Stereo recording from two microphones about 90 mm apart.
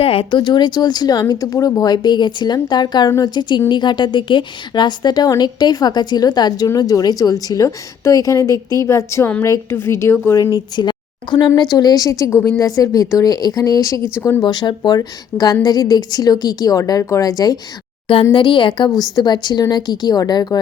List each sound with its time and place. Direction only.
0.0 s a woman's voice: 90° left; by 10.3 s 30° left (ahead or behind)
10.3 s a woman's voice: 40° left (ahead or behind)
10.8 s a woman's voice: 60° left (ahead or behind); by 14.4 s 35° left (ahead or behind)
14.4 s speech: 55° left (ahead or behind)
18.3 s a woman's voice: 70° left (ahead or behind)
19.1 s speech: 55° left (ahead or behind)